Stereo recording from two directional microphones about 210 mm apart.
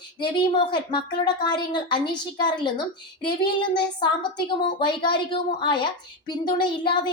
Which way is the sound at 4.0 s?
20° left (ahead or behind).